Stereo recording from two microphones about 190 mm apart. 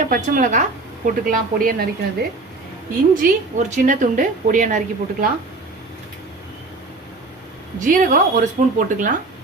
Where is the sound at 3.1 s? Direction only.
40° right (ahead or behind).